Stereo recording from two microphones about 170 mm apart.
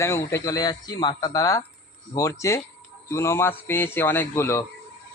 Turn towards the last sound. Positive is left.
turn(degrees=15)  # may be behind; listen again after turning